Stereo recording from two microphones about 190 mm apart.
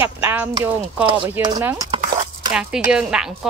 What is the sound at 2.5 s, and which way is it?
Speech, 5° right (ahead or behind).